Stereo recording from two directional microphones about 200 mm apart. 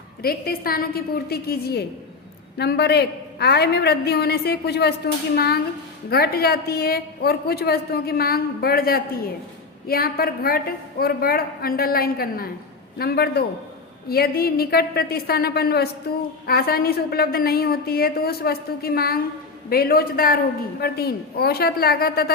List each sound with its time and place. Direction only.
0.2 s a woman's voice: 50° left (ahead or behind)